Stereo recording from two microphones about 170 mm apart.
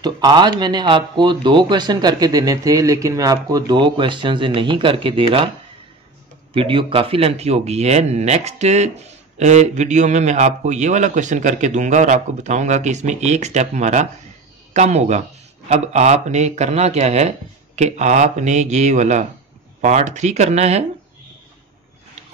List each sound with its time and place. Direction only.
0.0 s a man's voice: 25° right (ahead or behind)
6.5 s speech: 30° right (ahead or behind)